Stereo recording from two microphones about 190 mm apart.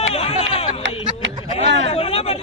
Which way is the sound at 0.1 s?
30° left (ahead or behind).